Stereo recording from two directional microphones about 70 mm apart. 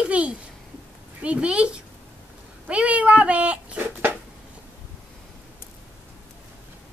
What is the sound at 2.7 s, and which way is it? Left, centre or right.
Cat, centre.